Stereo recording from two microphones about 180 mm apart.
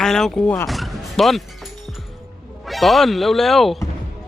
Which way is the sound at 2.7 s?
Centre (ahead or behind).